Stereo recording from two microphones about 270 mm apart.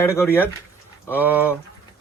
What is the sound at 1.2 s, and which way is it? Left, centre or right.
Speech, centre.